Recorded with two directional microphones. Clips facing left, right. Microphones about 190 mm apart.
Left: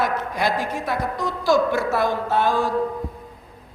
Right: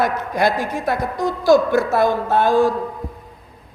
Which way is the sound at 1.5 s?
45° right (ahead or behind).